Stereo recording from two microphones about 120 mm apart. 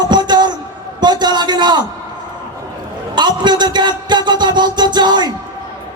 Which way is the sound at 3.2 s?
35° right (ahead or behind).